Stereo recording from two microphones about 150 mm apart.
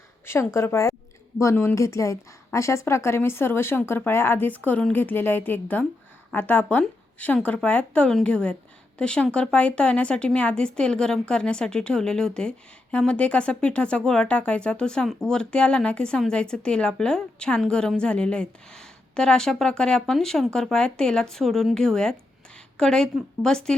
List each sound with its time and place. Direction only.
0.3 s a woman's voice: 15° left (ahead or behind)